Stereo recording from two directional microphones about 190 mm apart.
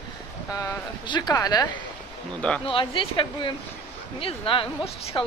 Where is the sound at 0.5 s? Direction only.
20° left (ahead or behind).